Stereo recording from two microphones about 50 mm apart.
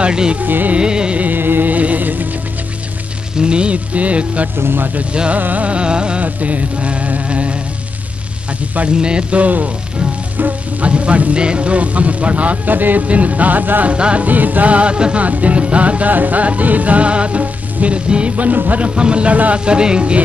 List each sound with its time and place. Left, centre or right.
0.0 s music: centre
0.4 s music: right
0.7 s speech: centre
1.2 s music: right
3.3 s speech: right
4.6 s speech: right
5.1 s speech: centre
5.4 s speech: right
6.2 s speech: right
8.7 s speech: right
13.9 s speech: right
14.2 s speech: right; by 20.2 s centre